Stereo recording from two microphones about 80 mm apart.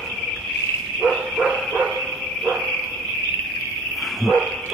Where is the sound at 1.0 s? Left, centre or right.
Centre.